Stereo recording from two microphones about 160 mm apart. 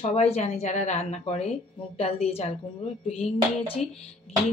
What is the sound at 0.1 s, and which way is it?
A woman's voice, 40° left (ahead or behind).